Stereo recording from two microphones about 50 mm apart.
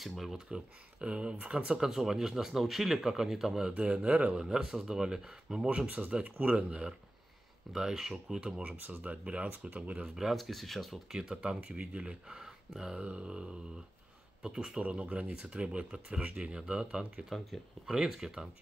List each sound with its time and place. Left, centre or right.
0.0 s speech: centre
1.0 s speech: centre
3.7 s speech: right
4.3 s speech: centre
6.2 s speech: right
7.7 s speech: centre
8.7 s speech: right
10.3 s speech: centre
11.1 s speech: centre
14.8 s speech: right
17.3 s speech: centre